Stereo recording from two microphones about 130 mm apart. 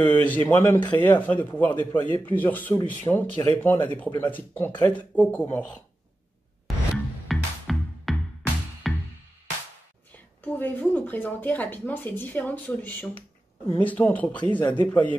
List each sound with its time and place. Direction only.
0.0 s speech: 10° left (ahead or behind)
7.2 s music: centre (ahead or behind)
10.1 s speech: 15° left (ahead or behind)